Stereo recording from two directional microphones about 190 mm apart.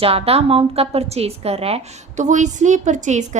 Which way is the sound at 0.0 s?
30° right (ahead or behind).